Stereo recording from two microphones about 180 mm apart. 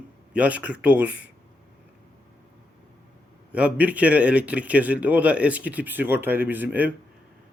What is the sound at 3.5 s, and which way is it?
A man's voice, 10° right (ahead or behind).